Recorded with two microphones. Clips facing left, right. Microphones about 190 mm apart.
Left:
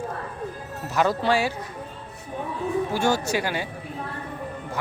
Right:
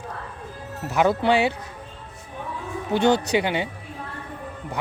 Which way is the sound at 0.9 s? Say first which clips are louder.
Right 2 dB; 15° right (ahead or behind).